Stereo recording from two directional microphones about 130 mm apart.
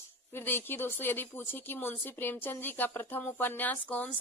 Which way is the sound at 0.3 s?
15° left (ahead or behind).